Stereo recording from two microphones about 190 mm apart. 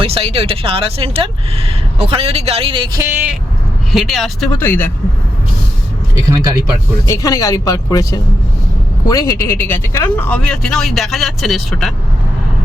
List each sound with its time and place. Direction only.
0.0 s speech: 30° right (ahead or behind)
3.0 s speech: 10° right (ahead or behind)
4.6 s speech: 10° left (ahead or behind)
6.4 s speech: 20° right (ahead or behind)
7.1 s speech: 20° left (ahead or behind); by 11.9 s centre (ahead or behind)